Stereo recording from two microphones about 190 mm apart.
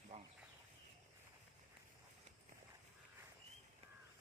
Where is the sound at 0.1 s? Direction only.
35° right (ahead or behind).